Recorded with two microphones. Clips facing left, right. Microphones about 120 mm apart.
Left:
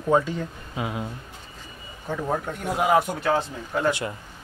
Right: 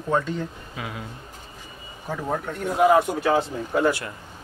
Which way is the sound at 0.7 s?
25° left (ahead or behind).